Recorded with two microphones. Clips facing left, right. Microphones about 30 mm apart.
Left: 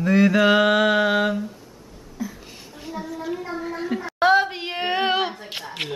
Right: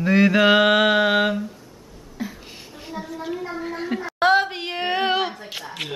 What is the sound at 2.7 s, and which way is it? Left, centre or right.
A woman's voice, centre.